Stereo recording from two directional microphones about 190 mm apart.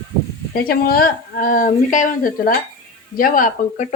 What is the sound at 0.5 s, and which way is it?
A woman's voice, 50° left (ahead or behind).